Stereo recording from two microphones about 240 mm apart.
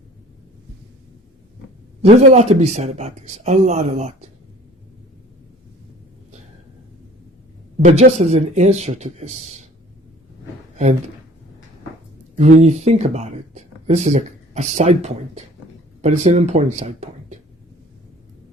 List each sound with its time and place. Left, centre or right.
2.0 s speech: right
7.9 s speech: right
12.4 s speech: right